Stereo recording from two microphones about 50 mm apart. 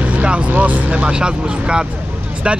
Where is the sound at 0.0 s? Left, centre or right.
Right.